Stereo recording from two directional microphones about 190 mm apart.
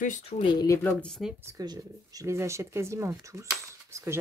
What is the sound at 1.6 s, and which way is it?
Speech, 20° right (ahead or behind).